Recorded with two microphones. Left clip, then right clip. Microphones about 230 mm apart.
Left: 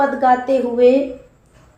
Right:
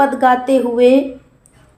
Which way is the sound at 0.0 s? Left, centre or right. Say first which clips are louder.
Right 2 dB; right.